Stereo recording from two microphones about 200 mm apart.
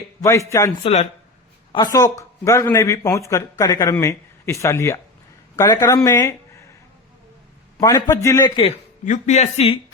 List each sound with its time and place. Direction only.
0.2 s a man's voice: 15° left (ahead or behind)
0.8 s speech: 25° left (ahead or behind)
7.8 s speech: 15° left (ahead or behind)
8.6 s speech: 35° left (ahead or behind)